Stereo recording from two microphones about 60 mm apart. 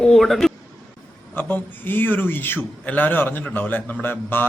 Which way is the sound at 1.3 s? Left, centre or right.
Left.